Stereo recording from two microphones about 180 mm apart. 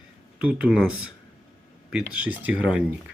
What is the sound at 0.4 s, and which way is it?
Speech, 5° right (ahead or behind).